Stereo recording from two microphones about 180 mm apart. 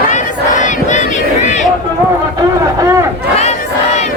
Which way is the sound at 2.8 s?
15° right (ahead or behind).